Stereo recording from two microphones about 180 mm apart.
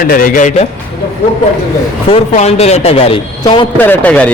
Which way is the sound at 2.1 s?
35° left (ahead or behind).